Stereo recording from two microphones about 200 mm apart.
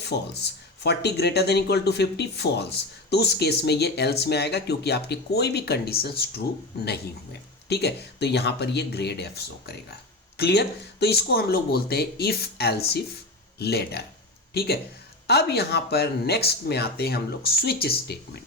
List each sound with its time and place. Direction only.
0.1 s speech: 55° left (ahead or behind)
7.7 s speech: 55° left (ahead or behind)